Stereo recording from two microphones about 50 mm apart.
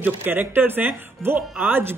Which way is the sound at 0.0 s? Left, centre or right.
Right.